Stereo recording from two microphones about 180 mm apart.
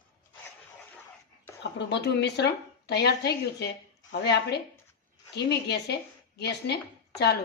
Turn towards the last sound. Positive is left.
turn(degrees=65)  # may be behind; listen again after turning